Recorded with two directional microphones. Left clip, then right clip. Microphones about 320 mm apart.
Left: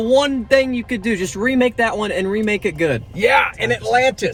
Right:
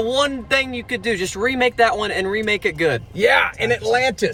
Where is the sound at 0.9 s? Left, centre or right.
Centre.